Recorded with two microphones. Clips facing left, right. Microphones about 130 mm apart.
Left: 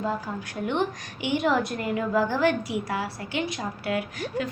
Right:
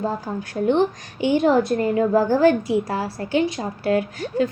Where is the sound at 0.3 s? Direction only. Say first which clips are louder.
Right 8 dB; 30° right (ahead or behind).